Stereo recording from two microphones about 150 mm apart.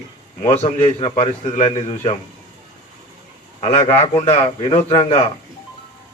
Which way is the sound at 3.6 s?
40° left (ahead or behind).